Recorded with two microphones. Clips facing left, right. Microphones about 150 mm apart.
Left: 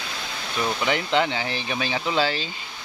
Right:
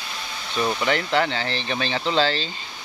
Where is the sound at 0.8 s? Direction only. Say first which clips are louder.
Left 1 dB; 15° left (ahead or behind).